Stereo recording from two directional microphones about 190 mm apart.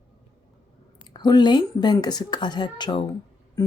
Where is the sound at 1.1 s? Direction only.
25° left (ahead or behind).